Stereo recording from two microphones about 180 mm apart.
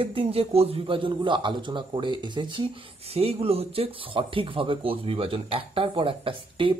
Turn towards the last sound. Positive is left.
turn(degrees=-30)  # may be behind; listen again after turning